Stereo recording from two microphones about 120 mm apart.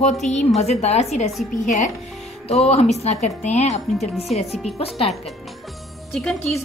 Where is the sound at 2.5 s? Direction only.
60° left (ahead or behind).